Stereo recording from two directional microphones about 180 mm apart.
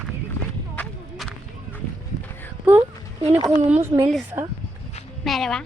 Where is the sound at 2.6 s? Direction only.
15° right (ahead or behind).